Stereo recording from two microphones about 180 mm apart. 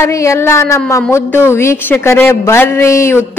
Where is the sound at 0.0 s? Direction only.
15° left (ahead or behind).